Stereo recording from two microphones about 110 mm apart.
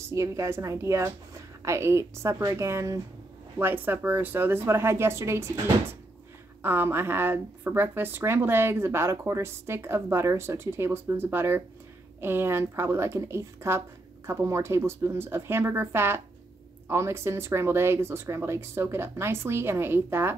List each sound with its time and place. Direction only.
0.1 s speech: 25° right (ahead or behind)